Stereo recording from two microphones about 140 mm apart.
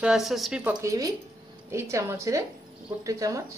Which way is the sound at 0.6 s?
20° right (ahead or behind).